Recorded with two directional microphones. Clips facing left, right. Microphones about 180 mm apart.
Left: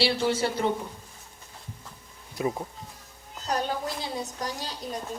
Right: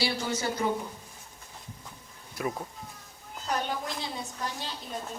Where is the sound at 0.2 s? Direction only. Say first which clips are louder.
Left 6 dB; 30° left (ahead or behind).